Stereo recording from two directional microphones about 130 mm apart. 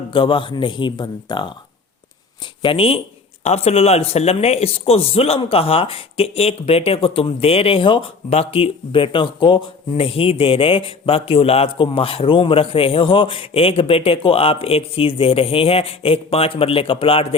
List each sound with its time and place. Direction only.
0.1 s speech: 40° left (ahead or behind)
2.6 s speech: 45° left (ahead or behind)